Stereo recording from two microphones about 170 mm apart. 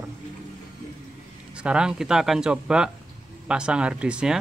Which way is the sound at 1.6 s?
5° right (ahead or behind).